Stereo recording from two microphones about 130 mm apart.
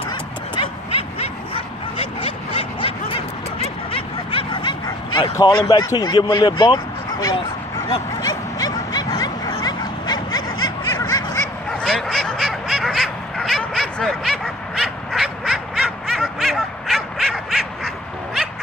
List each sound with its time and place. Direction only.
0.6 s bow-wow: 45° left (ahead or behind)
5.6 s speech: 35° left (ahead or behind)
8.2 s a sound: 30° left (ahead or behind)
11.8 s duck: 5° left (ahead or behind)